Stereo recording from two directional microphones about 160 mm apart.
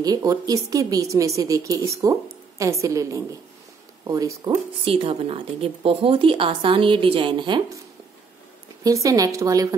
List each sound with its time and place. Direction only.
0.0 s a woman's voice: 20° right (ahead or behind)
4.8 s speech: 35° right (ahead or behind)
8.8 s a woman's voice: 20° right (ahead or behind)